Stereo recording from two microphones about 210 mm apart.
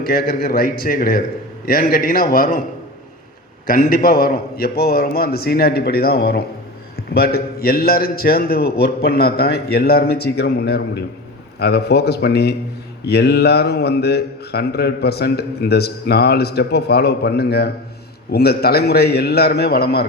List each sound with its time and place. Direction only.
0.0 s speech: 45° left (ahead or behind)
3.7 s speech: 45° left (ahead or behind)